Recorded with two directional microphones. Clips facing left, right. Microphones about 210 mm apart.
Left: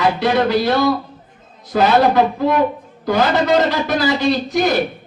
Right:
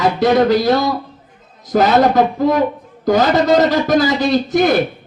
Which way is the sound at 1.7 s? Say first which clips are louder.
Right 1 dB; 45° right (ahead or behind).